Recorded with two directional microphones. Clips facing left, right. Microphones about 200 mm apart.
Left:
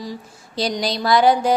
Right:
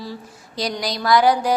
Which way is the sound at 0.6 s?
30° left (ahead or behind).